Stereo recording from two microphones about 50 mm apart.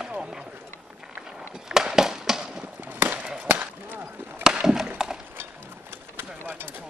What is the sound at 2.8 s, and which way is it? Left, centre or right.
Chop, right.